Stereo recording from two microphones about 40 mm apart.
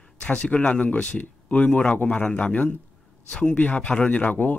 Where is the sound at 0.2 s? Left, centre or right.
Left.